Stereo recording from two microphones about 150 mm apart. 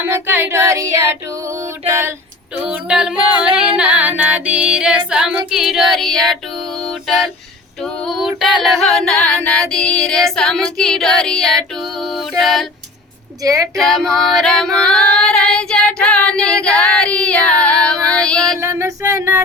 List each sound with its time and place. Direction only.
0.1 s child singing: 15° right (ahead or behind)
2.6 s a capella: 5° right (ahead or behind)
3.4 s female singing: 5° right (ahead or behind)
7.8 s female singing: centre (ahead or behind)
12.4 s music: centre (ahead or behind)
13.4 s speech: 20° right (ahead or behind)
13.7 s female singing: centre (ahead or behind)
18.6 s a sound: 20° right (ahead or behind)